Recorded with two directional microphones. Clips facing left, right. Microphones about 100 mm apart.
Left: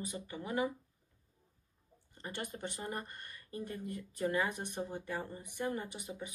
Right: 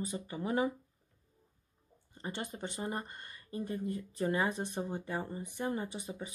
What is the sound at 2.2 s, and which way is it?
Speech, 20° right (ahead or behind).